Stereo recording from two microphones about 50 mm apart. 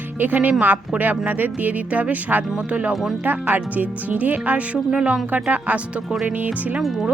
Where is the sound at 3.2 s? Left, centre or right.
Right.